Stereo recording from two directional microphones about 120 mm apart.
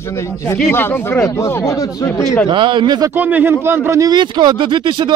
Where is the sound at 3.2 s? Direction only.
15° right (ahead or behind); by 5.1 s 40° right (ahead or behind).